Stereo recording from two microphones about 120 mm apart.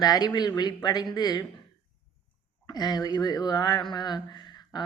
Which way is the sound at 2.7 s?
35° left (ahead or behind).